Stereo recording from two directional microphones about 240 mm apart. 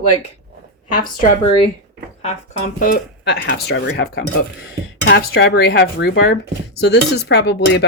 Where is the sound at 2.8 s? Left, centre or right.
Left.